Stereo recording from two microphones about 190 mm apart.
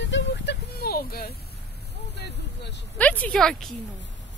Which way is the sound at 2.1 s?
60° left (ahead or behind).